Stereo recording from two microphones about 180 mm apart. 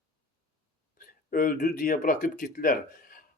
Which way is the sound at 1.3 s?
50° left (ahead or behind).